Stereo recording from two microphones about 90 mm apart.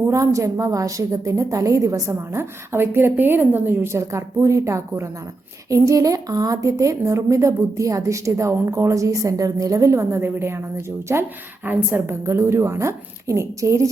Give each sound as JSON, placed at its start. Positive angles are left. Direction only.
{"t": 0.1, "sound": "a woman's voice", "side_deg": -35}